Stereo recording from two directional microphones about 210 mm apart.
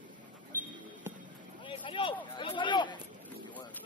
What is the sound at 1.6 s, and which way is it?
Speech, 25° left (ahead or behind).